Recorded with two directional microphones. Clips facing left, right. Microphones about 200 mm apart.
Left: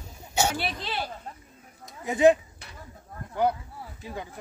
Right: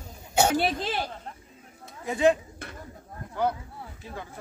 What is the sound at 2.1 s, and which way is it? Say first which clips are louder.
Speech: left 3 dB; 20° left (ahead or behind).